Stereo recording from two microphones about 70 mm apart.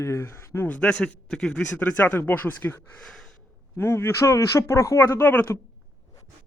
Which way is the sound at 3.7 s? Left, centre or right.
Left.